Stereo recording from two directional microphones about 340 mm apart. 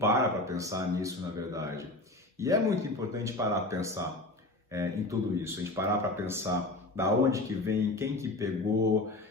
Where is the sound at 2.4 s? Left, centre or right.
Centre.